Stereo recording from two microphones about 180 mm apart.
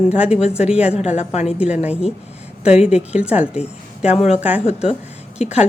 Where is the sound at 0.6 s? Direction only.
5° right (ahead or behind).